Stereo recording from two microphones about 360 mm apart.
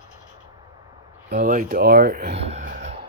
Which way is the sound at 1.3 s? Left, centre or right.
Right.